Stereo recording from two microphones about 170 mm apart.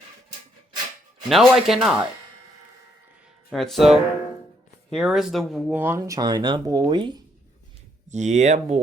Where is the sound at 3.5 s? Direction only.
Centre (ahead or behind); by 7.2 s 25° right (ahead or behind).